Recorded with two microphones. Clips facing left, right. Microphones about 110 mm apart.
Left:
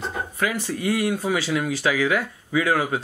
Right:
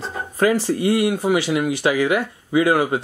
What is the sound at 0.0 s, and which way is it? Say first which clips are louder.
Speech: right 6 dB; 35° right (ahead or behind).